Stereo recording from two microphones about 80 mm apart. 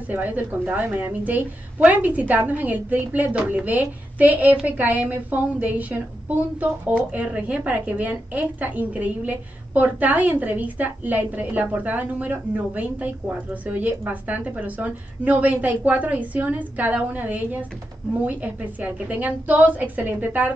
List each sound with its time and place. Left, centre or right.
0.1 s a woman's voice: right